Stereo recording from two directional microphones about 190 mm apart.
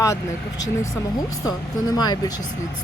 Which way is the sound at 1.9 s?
20° left (ahead or behind).